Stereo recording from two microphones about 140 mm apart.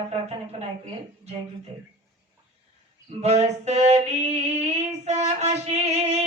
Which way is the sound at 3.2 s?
50° right (ahead or behind).